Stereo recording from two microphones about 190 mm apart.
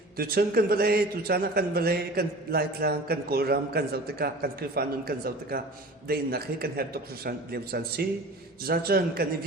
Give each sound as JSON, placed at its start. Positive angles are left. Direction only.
{"t": 0.2, "sound": "a man's voice", "side_deg": -50}